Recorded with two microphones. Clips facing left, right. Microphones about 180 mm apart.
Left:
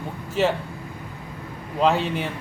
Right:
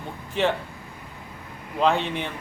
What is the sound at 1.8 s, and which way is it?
Speech, 5° left (ahead or behind).